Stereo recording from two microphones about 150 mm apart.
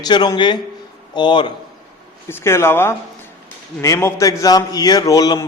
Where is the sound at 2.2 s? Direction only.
20° left (ahead or behind).